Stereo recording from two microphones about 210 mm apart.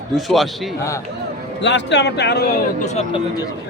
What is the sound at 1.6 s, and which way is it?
Speech, 55° left (ahead or behind).